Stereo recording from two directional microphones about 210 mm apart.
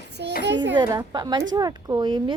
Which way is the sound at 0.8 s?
20° right (ahead or behind).